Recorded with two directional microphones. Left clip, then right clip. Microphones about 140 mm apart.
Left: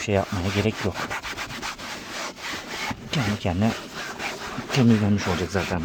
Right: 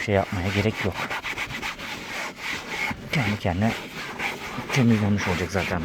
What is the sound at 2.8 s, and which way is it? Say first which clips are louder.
Speech: right 2 dB; 20° left (ahead or behind).